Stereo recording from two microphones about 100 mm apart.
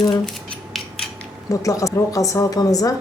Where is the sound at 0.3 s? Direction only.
5° left (ahead or behind).